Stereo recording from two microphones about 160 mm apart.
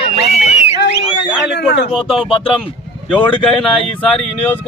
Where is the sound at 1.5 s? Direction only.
90° left.